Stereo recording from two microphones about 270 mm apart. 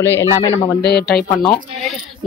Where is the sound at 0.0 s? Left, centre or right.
Centre.